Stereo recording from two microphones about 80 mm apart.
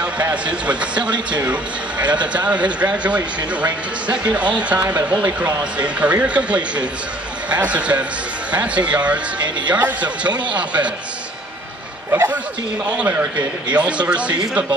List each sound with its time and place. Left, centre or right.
0.0 s speech: centre
12.1 s a man's voice: right; by 14.4 s centre